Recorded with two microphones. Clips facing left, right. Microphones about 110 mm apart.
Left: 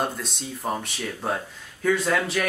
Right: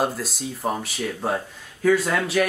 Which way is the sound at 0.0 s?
5° right (ahead or behind).